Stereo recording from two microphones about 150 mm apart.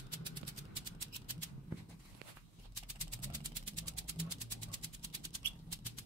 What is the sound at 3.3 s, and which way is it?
Vehicle, 30° right (ahead or behind).